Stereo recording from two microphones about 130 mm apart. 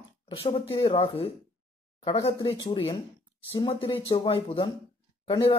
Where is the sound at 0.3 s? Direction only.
45° left (ahead or behind).